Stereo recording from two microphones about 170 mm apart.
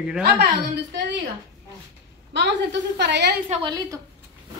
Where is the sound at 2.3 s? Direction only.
90° right.